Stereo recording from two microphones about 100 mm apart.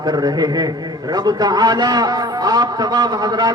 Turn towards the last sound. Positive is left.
turn(degrees=-40)  # may be behind; listen again after turning